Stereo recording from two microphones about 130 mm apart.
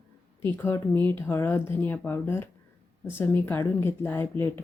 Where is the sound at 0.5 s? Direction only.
15° left (ahead or behind).